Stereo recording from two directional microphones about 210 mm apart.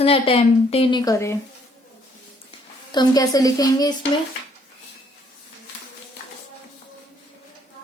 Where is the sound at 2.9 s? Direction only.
20° left (ahead or behind).